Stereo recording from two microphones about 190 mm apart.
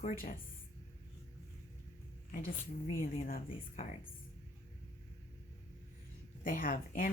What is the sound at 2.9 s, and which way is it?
Speech, 45° left (ahead or behind).